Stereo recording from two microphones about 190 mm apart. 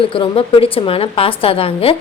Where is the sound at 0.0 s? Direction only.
30° left (ahead or behind).